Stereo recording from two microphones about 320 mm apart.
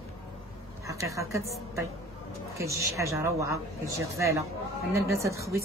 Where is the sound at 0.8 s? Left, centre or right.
Centre.